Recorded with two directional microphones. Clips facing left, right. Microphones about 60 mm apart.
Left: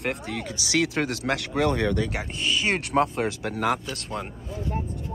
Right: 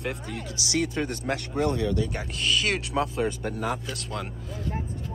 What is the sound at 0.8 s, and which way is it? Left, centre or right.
Speech, left.